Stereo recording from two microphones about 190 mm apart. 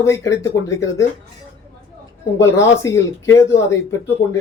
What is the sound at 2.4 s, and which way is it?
Speech, 15° left (ahead or behind).